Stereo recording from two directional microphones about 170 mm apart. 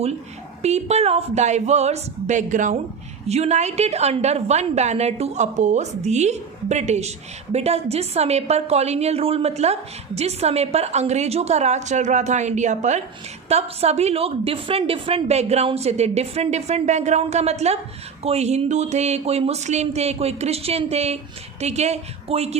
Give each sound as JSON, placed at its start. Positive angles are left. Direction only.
{"t": 0.6, "sound": "a woman's voice", "side_deg": -40}